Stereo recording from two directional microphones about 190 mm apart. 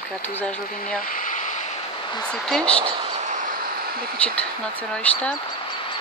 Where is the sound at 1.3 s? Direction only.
40° left (ahead or behind).